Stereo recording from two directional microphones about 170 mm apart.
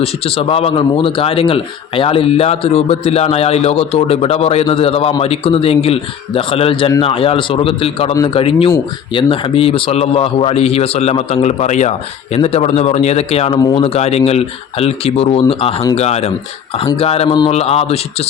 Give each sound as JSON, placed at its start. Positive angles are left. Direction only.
{"t": 0.0, "sound": "a man's voice", "side_deg": 35}
{"t": 13.6, "sound": "speech", "side_deg": 25}
{"t": 13.8, "sound": "a man's voice", "side_deg": 40}
{"t": 17.2, "sound": "speech", "side_deg": 25}
{"t": 17.5, "sound": "a man's voice", "side_deg": 35}